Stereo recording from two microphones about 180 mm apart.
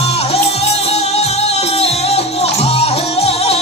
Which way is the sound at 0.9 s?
35° left (ahead or behind).